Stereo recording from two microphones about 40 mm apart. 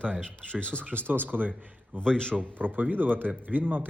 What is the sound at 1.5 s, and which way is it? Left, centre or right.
Speech, right.